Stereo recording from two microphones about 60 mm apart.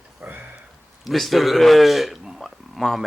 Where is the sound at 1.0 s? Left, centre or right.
Centre.